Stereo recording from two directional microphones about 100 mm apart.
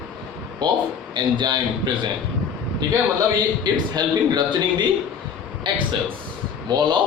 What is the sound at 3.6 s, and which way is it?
A man's voice, 45° right (ahead or behind).